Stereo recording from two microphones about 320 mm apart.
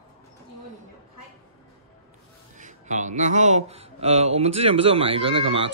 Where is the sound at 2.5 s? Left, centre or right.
Right.